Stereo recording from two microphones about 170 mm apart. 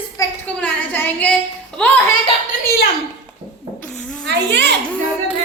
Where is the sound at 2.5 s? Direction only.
60° left (ahead or behind).